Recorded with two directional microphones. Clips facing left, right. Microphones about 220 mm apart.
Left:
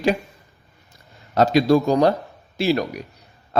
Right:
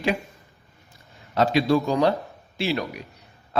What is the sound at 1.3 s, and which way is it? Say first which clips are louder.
A man's voice: left 4 dB; 40° left (ahead or behind).